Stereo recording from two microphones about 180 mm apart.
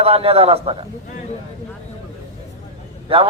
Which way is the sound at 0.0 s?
35° right (ahead or behind).